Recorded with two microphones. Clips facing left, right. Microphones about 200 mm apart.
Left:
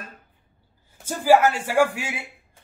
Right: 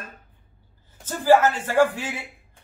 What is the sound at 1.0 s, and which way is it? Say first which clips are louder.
Speech: even; 10° left (ahead or behind).